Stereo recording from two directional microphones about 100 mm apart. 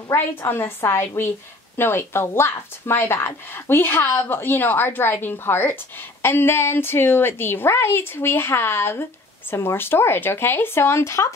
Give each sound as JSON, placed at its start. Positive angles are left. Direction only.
{"t": 0.1, "sound": "speech", "side_deg": 20}